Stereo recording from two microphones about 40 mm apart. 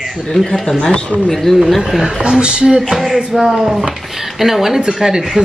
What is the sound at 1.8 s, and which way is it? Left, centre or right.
Speech, centre.